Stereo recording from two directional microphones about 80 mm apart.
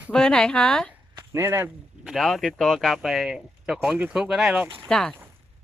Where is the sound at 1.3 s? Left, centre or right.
Right.